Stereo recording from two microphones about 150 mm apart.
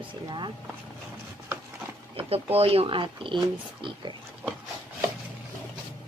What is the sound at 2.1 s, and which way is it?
Speech, 40° right (ahead or behind).